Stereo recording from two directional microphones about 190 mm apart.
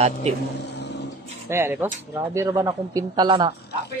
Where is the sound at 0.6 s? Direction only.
65° left (ahead or behind).